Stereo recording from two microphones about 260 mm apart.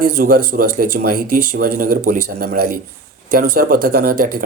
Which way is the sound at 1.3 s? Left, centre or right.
Right.